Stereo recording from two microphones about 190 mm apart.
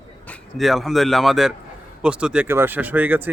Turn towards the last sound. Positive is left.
turn(degrees=-10)  # may be behind; listen again after turning